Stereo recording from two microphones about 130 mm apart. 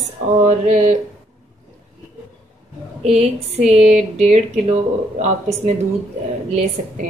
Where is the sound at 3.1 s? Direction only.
55° right (ahead or behind).